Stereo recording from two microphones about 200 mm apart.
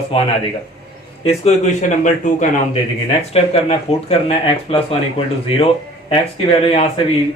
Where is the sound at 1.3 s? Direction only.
35° left (ahead or behind).